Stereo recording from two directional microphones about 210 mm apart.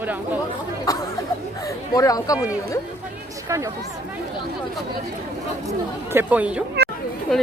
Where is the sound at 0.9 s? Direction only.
15° left (ahead or behind).